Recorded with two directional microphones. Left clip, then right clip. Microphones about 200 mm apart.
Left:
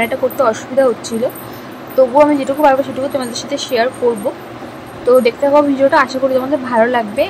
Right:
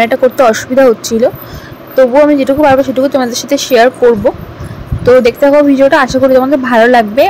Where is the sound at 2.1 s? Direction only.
25° right (ahead or behind).